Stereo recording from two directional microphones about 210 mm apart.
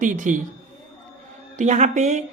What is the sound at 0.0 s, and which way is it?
Speech, 35° right (ahead or behind).